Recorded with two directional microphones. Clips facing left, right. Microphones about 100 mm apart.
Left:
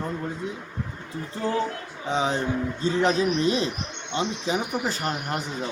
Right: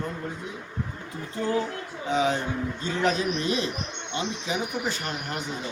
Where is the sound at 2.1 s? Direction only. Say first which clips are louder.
Even; 30° left (ahead or behind).